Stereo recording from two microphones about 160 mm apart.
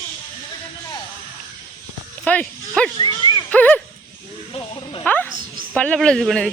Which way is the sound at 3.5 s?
10° left (ahead or behind).